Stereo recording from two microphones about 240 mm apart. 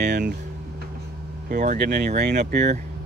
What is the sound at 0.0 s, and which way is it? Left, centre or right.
Speech, right.